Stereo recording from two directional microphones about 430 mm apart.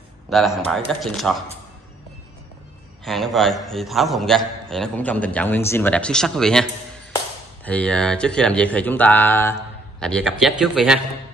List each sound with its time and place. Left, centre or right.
0.3 s a man's voice: centre
3.1 s a man's voice: centre